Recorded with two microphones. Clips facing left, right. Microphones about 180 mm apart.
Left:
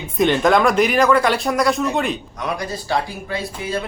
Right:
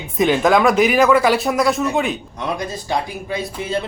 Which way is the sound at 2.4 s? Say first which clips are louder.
Right 1 dB; 25° right (ahead or behind).